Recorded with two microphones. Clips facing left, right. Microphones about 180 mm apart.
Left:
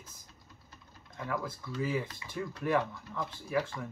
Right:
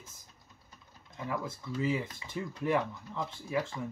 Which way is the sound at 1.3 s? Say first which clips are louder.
Even; 20° right (ahead or behind).